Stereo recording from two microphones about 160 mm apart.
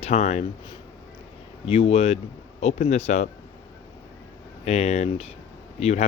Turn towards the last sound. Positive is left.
turn(degrees=45)  # may be behind; listen again after turning